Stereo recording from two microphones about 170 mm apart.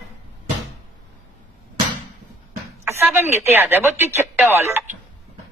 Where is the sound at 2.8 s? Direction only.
15° right (ahead or behind).